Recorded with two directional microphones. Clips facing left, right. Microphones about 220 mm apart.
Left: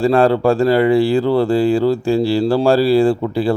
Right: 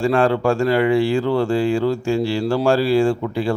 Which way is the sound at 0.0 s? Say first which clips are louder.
Left 4 dB; 35° left (ahead or behind).